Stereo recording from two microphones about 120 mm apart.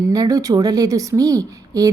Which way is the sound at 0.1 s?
30° right (ahead or behind).